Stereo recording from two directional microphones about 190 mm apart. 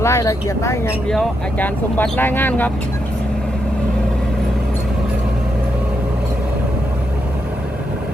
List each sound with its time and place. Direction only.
0.0 s speech: 15° left (ahead or behind)
1.0 s speech: 5° left (ahead or behind)